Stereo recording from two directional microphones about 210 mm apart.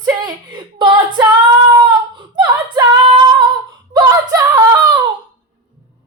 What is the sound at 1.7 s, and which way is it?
Female singing, 25° right (ahead or behind).